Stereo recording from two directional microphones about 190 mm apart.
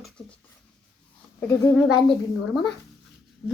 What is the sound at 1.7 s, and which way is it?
Speech, centre (ahead or behind).